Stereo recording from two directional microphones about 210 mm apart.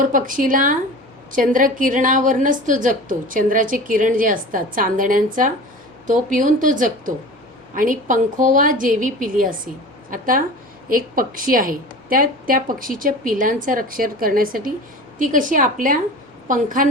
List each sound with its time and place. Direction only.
0.1 s a woman's voice: 40° right (ahead or behind)